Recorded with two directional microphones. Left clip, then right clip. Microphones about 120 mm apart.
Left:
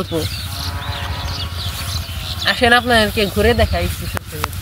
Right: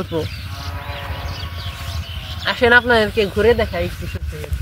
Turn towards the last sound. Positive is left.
turn(degrees=-20)  # may be behind; listen again after turning